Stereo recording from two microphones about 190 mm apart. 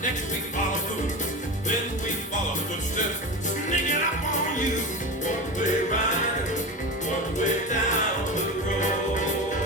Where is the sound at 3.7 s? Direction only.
40° left (ahead or behind).